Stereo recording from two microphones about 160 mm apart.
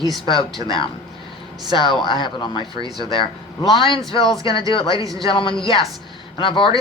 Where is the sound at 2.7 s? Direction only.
25° right (ahead or behind).